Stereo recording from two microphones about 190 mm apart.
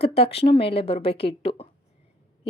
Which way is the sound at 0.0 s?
30° left (ahead or behind).